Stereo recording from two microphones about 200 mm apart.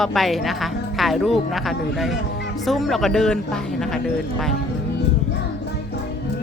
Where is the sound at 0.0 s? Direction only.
Centre (ahead or behind).